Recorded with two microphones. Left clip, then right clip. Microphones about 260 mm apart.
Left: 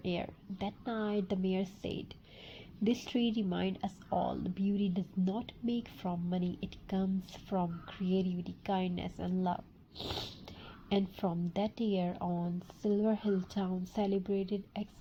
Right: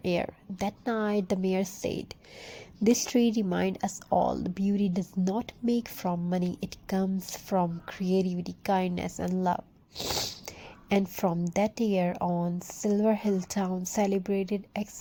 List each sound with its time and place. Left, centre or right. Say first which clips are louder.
0.0 s speech: right 9 dB; right